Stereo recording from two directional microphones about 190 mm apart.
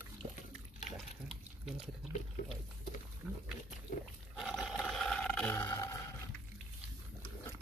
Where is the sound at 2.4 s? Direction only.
45° left (ahead or behind).